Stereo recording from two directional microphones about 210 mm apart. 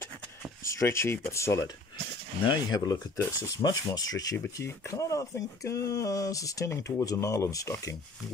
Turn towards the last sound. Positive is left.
turn(degrees=15)  # may be behind; listen again after turning